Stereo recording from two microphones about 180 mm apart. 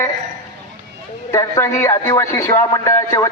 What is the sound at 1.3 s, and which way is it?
Speech, 15° left (ahead or behind).